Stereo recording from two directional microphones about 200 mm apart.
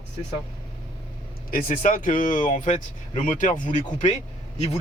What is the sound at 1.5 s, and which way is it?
Speech, 45° left (ahead or behind).